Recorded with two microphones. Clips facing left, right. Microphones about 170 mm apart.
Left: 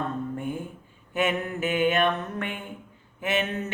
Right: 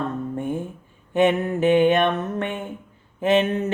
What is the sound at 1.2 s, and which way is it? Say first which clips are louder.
Mantra: right 8 dB; 30° right (ahead or behind).